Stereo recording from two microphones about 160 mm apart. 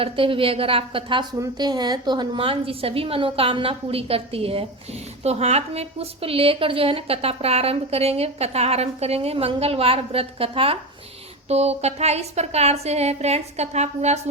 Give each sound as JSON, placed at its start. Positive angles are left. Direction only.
{"t": 0.0, "sound": "a woman's voice", "side_deg": -35}